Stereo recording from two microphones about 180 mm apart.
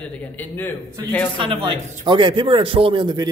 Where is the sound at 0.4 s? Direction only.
10° left (ahead or behind).